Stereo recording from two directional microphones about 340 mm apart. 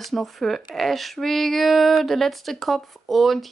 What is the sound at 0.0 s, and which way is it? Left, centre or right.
Female singing, centre.